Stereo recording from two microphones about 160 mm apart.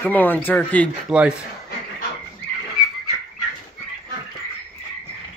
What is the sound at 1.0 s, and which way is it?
Speech, 5° right (ahead or behind).